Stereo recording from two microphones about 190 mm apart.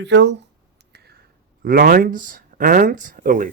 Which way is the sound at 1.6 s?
50° right (ahead or behind).